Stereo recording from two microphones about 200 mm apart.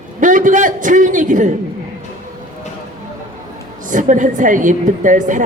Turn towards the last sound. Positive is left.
turn(degrees=-40)  # may be behind; listen again after turning